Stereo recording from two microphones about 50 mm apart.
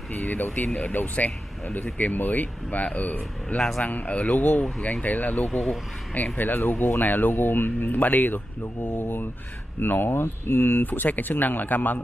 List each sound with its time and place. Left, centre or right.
0.3 s speech: left
10.9 s speech: left